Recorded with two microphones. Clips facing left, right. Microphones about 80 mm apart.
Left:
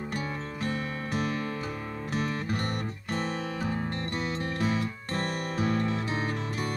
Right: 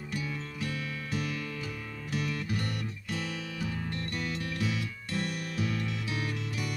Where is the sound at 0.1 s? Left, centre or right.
Left.